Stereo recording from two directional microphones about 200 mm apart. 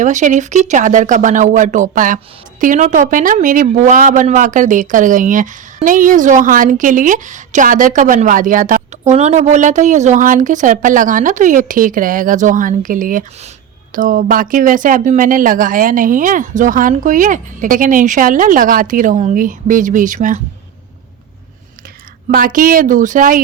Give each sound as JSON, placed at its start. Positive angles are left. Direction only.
{"t": 0.0, "sound": "speech", "side_deg": -40}
{"t": 22.3, "sound": "speech", "side_deg": -45}